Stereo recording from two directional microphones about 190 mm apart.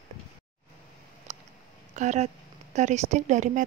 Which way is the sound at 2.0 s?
35° right (ahead or behind).